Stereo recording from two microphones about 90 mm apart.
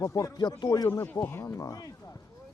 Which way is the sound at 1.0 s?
25° left (ahead or behind).